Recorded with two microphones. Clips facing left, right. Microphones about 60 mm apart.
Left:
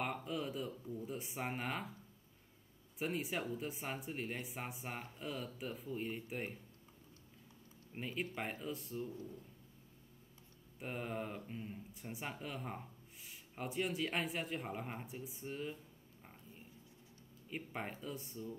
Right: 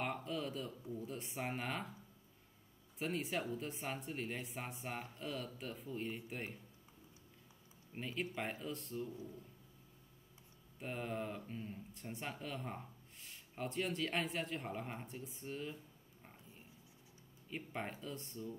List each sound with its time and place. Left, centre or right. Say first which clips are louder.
0.0 s a sound: left 1 dB; centre
0.9 s speech: even; centre
3.0 s speech: even; centre
7.9 s speech: even; centre
10.8 s speech: even; centre
17.5 s speech: even; centre